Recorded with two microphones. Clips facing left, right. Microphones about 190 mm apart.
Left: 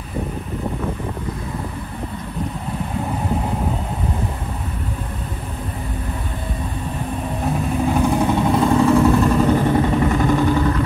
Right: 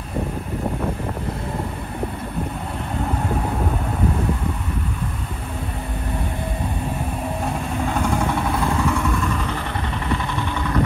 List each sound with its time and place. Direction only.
7.9 s vehicle: 15° left (ahead or behind)
8.7 s vehicle: 35° left (ahead or behind)